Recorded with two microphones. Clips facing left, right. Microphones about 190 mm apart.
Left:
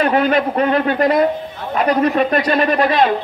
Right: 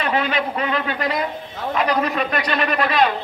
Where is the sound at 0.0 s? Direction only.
45° left (ahead or behind).